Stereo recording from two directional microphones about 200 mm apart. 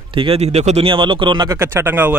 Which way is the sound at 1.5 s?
10° right (ahead or behind).